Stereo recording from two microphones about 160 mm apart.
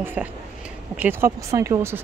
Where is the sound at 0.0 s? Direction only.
10° right (ahead or behind).